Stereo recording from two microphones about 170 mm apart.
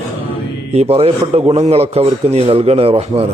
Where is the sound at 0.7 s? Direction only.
35° right (ahead or behind).